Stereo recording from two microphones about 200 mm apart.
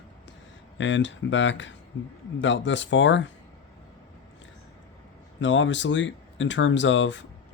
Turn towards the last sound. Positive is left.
turn(degrees=65)  # may be behind; listen again after turning